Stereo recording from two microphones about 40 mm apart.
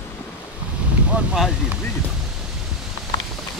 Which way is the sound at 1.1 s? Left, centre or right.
Right.